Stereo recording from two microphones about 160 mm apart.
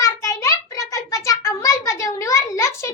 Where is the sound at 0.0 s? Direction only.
20° left (ahead or behind).